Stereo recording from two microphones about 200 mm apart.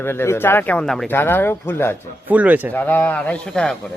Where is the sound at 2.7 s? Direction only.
10° left (ahead or behind).